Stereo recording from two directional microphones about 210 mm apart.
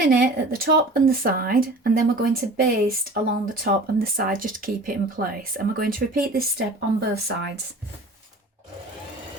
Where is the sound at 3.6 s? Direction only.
45° right (ahead or behind).